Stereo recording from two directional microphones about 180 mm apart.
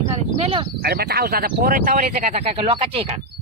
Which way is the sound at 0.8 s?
60° right (ahead or behind).